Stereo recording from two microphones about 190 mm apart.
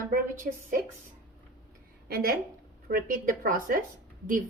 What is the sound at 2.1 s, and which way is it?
A woman's voice, 50° right (ahead or behind).